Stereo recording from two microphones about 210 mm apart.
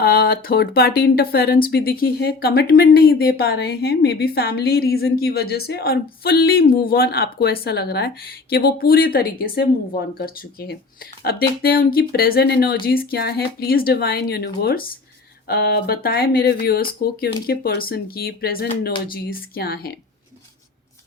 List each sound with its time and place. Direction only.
0.0 s speech: 45° left (ahead or behind)